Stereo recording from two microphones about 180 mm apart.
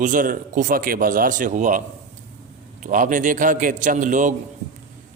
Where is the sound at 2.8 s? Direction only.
45° right (ahead or behind).